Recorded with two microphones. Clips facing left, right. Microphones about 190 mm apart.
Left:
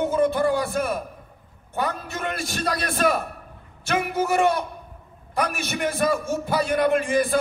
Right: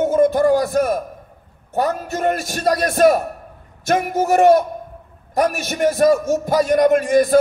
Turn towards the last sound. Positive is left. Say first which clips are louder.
# right 7 dB
turn(degrees=-45)  # may be behind; listen again after turning